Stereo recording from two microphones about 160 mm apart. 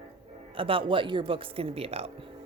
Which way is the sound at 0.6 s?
35° right (ahead or behind).